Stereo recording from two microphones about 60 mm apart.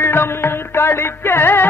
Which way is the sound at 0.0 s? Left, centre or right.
Left.